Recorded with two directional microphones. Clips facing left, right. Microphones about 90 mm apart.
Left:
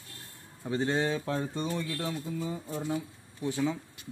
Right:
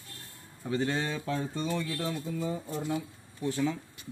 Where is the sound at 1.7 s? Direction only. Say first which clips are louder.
Right 1 dB; 5° left (ahead or behind).